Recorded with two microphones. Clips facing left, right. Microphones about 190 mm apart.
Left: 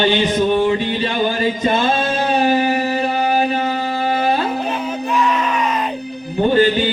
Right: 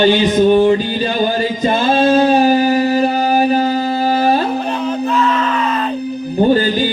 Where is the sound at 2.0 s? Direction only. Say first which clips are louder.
Right 7 dB; 35° right (ahead or behind).